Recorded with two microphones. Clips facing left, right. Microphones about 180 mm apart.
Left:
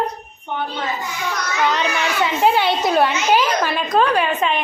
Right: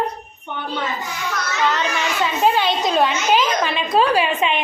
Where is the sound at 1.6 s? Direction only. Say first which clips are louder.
Left 1 dB; 15° left (ahead or behind).